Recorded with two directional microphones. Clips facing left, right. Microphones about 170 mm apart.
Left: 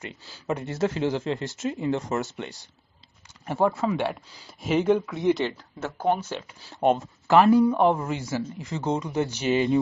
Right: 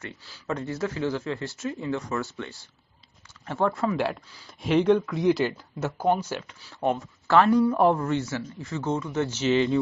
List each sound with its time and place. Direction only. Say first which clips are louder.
0.0 s speech: left 2 dB; 15° left (ahead or behind); by 5.5 s centre (ahead or behind)
6.7 s speech: left 4 dB; 20° left (ahead or behind)
7.7 s speech: right 1 dB; centre (ahead or behind)